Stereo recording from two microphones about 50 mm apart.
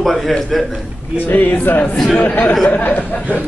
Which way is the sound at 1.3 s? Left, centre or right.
Left.